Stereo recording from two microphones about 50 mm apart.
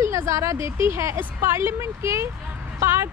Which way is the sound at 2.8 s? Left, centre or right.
Right.